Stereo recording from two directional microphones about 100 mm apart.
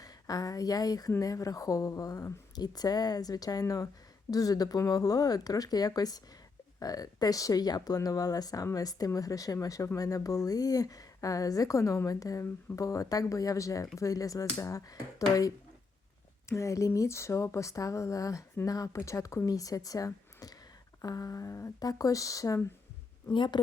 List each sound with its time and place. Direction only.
0.0 s a woman's voice: 40° left (ahead or behind)
16.5 s a woman's voice: 30° left (ahead or behind)
23.3 s speech: 50° left (ahead or behind)